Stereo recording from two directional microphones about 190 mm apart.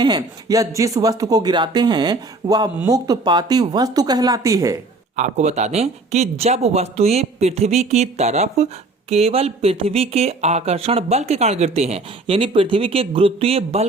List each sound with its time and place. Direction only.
0.0 s speech: 20° right (ahead or behind)
5.1 s speech: 40° right (ahead or behind)